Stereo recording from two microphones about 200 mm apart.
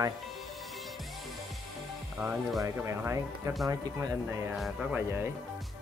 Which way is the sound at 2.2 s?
5° right (ahead or behind).